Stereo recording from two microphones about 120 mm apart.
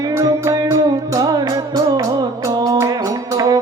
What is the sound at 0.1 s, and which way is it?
Music, 25° right (ahead or behind).